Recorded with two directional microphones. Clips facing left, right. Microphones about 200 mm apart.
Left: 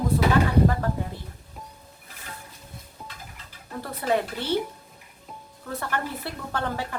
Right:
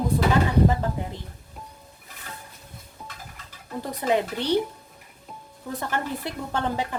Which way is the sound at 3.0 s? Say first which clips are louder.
Right 1 dB; centre (ahead or behind).